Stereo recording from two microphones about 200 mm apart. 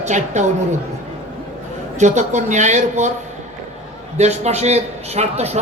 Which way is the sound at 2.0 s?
35° right (ahead or behind).